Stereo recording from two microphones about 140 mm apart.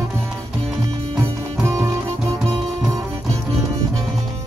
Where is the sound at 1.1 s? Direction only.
20° right (ahead or behind).